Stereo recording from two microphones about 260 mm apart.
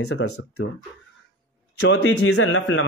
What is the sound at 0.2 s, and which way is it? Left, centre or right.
Speech, left.